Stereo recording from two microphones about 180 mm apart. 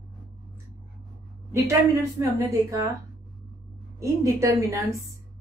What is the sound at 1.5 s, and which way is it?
Speech, 15° right (ahead or behind).